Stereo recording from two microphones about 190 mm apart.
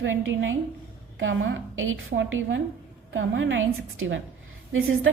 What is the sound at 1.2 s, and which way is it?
A woman's voice, 75° right (ahead or behind).